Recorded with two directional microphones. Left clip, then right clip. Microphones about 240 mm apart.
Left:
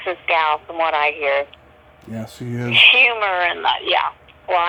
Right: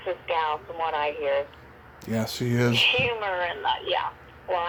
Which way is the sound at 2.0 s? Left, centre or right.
Centre.